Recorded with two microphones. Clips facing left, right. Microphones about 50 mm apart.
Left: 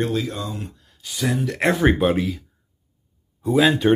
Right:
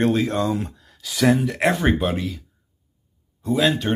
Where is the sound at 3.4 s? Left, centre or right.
Centre.